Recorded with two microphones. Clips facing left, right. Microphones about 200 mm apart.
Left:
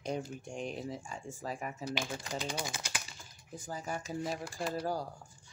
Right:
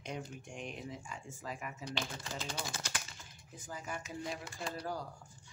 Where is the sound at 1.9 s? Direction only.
10° left (ahead or behind).